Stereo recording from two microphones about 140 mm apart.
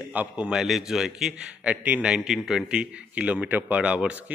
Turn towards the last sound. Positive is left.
turn(degrees=-10)  # may be behind; listen again after turning